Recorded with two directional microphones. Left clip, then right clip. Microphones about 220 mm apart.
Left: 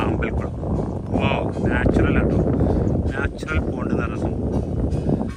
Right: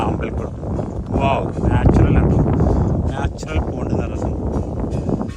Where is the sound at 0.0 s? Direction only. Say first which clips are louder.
Right 2 dB; 10° right (ahead or behind).